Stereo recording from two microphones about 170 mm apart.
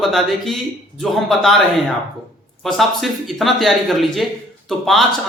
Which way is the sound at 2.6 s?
Centre (ahead or behind).